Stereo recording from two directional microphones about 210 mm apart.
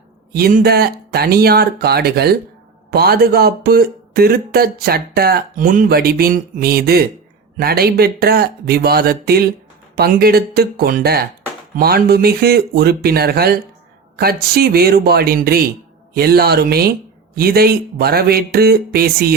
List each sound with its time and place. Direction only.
0.3 s speech: 45° right (ahead or behind)